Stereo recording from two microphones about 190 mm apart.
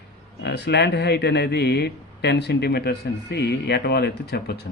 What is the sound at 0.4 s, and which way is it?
Speech, 60° left (ahead or behind).